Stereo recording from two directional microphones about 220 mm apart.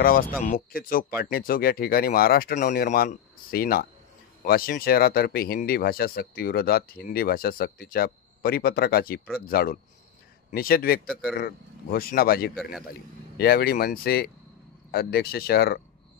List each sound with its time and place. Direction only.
0.5 s speech: 40° left (ahead or behind)
11.1 s a man's voice: 5° right (ahead or behind)
11.3 s speech: 45° left (ahead or behind)